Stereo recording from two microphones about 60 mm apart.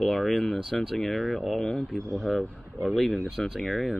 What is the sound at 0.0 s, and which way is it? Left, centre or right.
Speech, centre.